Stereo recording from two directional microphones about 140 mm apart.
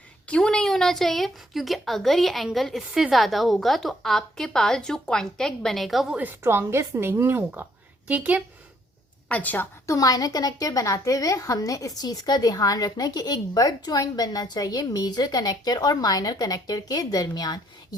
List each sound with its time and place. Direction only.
0.3 s a woman's voice: 5° left (ahead or behind); by 8.4 s 10° right (ahead or behind)
9.3 s a woman's voice: 10° left (ahead or behind); by 17.6 s 25° left (ahead or behind)